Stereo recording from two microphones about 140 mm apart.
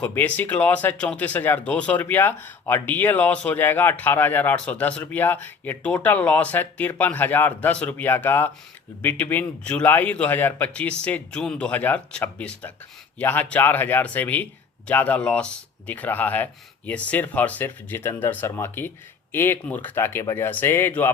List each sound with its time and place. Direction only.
0.0 s speech: 10° left (ahead or behind)